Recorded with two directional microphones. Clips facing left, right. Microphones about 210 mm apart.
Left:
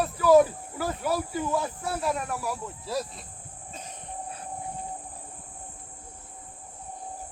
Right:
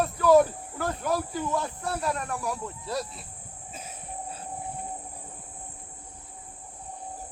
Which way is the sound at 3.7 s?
5° right (ahead or behind).